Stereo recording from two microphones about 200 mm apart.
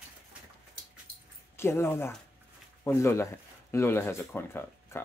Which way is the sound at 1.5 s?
10° left (ahead or behind).